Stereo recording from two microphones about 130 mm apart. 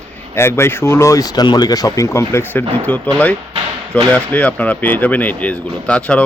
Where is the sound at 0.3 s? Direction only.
20° left (ahead or behind).